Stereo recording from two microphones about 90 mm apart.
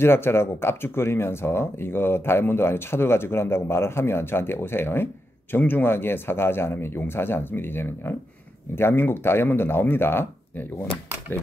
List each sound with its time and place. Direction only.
0.0 s speech: 25° left (ahead or behind)